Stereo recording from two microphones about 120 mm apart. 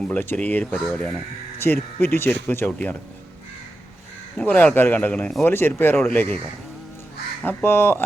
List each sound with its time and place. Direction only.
0.1 s speech: 15° left (ahead or behind)
1.5 s speech: 20° left (ahead or behind)
4.4 s speech: 15° left (ahead or behind)
7.4 s speech: 20° left (ahead or behind)